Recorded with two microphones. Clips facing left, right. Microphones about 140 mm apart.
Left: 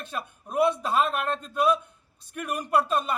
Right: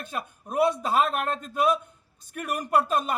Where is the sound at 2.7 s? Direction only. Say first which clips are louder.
Even; 5° right (ahead or behind).